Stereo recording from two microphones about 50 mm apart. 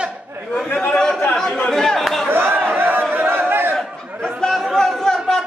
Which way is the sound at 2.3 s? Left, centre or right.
Right.